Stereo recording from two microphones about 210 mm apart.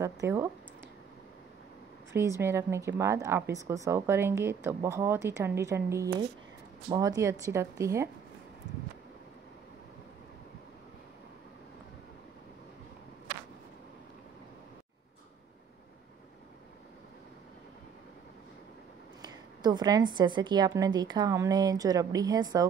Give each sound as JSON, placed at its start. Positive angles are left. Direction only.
{"t": 0.0, "sound": "a woman's voice", "side_deg": -15}
{"t": 2.1, "sound": "a woman's voice", "side_deg": -10}
{"t": 19.2, "sound": "a woman's voice", "side_deg": -20}